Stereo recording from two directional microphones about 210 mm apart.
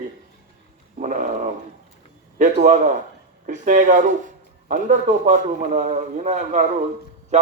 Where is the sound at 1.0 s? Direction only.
35° right (ahead or behind).